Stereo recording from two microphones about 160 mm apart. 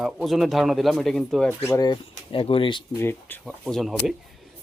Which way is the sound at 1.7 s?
25° left (ahead or behind).